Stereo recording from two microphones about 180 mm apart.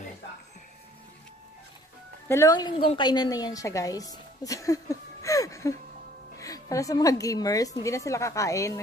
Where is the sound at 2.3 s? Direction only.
20° left (ahead or behind).